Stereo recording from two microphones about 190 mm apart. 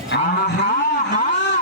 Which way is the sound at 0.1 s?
65° left (ahead or behind).